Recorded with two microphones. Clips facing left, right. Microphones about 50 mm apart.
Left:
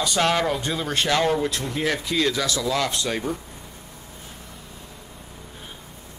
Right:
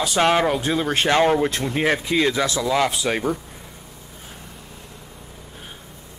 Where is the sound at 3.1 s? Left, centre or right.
Right.